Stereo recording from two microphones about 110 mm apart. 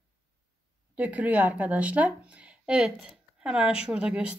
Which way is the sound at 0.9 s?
15° right (ahead or behind).